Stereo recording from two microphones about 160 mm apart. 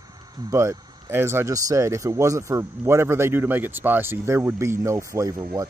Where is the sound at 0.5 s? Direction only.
20° right (ahead or behind).